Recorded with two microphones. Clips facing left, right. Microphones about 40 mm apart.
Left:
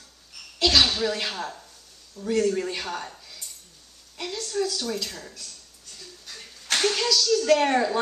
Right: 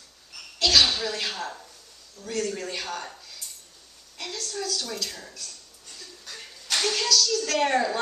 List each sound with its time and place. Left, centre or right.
0.6 s a sound: centre
1.0 s speech: centre
2.1 s speech: left
3.0 s a sound: centre
4.2 s speech: centre
6.8 s speech: centre